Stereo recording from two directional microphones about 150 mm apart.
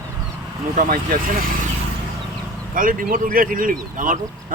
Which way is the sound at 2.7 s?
65° right (ahead or behind).